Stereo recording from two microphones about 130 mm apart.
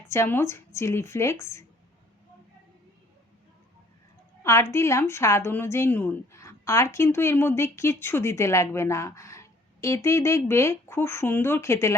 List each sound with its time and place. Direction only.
0.1 s a woman's voice: 20° left (ahead or behind)
4.4 s a woman's voice: 20° left (ahead or behind)